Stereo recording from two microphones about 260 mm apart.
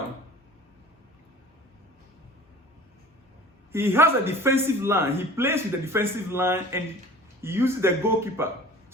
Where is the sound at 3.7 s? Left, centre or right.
Centre.